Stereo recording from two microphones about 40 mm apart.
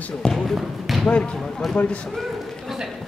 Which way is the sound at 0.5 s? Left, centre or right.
Centre.